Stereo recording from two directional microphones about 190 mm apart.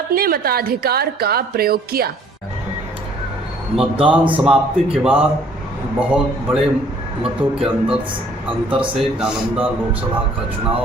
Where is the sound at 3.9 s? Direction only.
25° right (ahead or behind).